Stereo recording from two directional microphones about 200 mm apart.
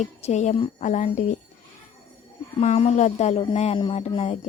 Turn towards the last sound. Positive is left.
turn(degrees=30)  # may be behind; listen again after turning